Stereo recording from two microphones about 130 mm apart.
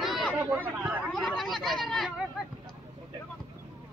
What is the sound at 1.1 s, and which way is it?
Speech, 5° left (ahead or behind).